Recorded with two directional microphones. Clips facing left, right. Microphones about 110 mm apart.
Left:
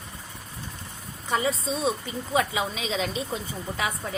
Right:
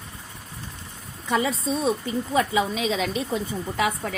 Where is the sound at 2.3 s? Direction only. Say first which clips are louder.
Right 3 dB; 45° right (ahead or behind).